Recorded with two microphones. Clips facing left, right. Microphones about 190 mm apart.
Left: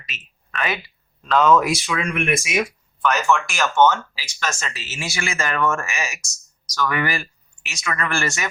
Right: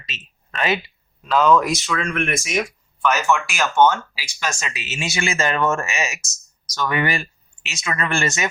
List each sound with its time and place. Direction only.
0.1 s speech: 25° right (ahead or behind)
1.2 s speech: 5° right (ahead or behind)
3.0 s speech: 5° right (ahead or behind); by 8.4 s 20° right (ahead or behind)